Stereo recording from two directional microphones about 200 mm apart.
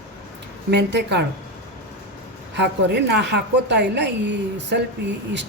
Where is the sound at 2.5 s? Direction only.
60° right (ahead or behind).